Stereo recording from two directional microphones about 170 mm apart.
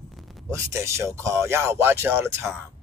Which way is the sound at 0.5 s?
15° right (ahead or behind).